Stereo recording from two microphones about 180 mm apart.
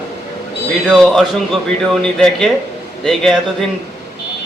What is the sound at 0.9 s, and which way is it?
A man's voice, centre (ahead or behind).